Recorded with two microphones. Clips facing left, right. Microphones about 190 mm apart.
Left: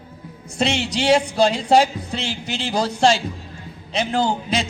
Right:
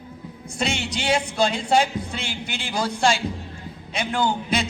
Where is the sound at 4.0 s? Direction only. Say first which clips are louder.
Left 3 dB; 30° left (ahead or behind).